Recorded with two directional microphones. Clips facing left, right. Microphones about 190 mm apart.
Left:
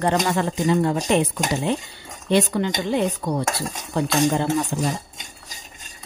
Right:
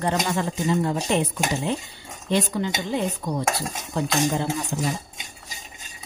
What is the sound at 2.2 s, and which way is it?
A woman's voice, 75° left (ahead or behind).